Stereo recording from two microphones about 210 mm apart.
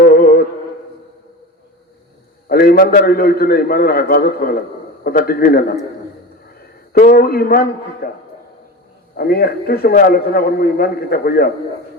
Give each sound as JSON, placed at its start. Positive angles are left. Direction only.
{"t": 0.0, "sound": "a sound", "side_deg": 45}
{"t": 2.5, "sound": "a man's voice", "side_deg": 45}
{"t": 6.9, "sound": "a man's voice", "side_deg": 45}
{"t": 9.1, "sound": "a man's voice", "side_deg": 45}